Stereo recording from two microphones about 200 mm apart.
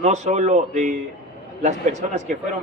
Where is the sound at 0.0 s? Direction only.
35° right (ahead or behind).